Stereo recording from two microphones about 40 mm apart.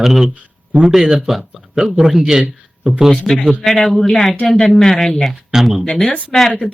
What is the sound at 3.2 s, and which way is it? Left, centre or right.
Speech, centre.